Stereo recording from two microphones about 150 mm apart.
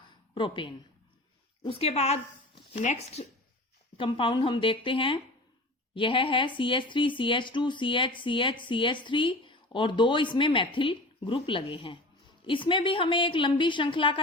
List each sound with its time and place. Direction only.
0.3 s speech: 35° left (ahead or behind)
1.8 s speech: 45° left (ahead or behind)
3.9 s speech: 35° left (ahead or behind)